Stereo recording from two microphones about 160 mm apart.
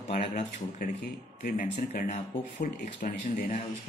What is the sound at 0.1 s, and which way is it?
Speech, 60° left (ahead or behind).